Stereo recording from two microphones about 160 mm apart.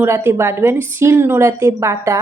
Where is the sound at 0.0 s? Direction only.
15° right (ahead or behind).